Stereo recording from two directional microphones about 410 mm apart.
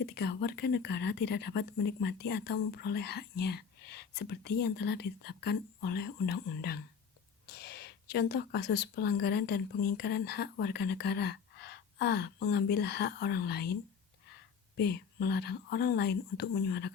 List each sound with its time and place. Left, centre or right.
0.0 s speech: left
14.8 s speech: left